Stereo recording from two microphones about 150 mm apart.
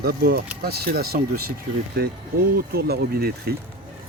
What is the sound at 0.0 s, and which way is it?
Speech, 90° right.